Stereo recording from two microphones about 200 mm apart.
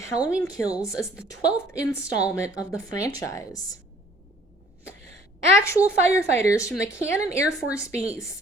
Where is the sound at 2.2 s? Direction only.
15° left (ahead or behind).